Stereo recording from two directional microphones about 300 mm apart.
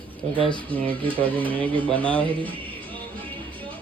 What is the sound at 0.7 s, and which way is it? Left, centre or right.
Speech, centre.